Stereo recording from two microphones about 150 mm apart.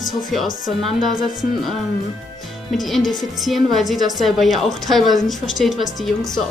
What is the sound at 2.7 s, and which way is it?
A woman's voice, centre (ahead or behind).